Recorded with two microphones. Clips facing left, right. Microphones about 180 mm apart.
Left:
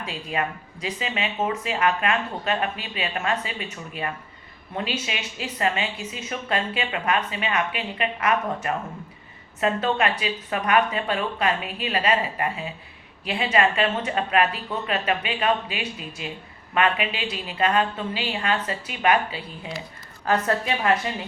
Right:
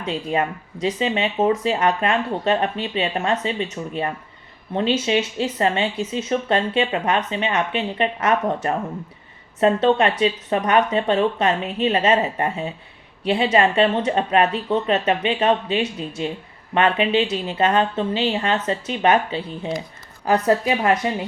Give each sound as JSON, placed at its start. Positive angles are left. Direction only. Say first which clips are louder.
{"t": 0.0, "sound": "a woman's voice", "louder": "right 6 dB", "side_deg": -30}